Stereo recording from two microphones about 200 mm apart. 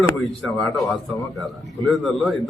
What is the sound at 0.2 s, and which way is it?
A man's voice, centre (ahead or behind).